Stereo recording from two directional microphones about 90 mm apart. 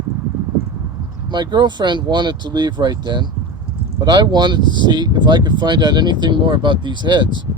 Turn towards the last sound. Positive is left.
turn(degrees=-60)  # may be behind; listen again after turning